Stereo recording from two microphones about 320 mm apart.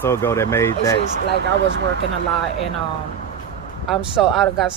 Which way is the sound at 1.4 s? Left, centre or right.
Right.